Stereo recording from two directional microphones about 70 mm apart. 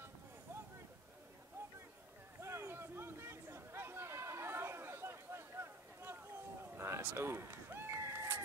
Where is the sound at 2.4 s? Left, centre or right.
Right.